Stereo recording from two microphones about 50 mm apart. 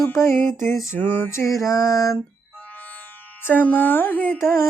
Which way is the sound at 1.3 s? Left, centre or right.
Left.